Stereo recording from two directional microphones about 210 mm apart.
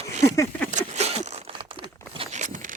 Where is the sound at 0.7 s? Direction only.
35° right (ahead or behind).